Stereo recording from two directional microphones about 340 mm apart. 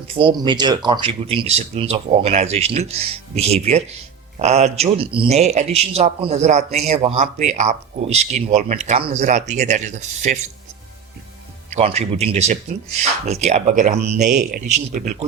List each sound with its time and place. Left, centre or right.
0.1 s a man's voice: centre
11.7 s a man's voice: centre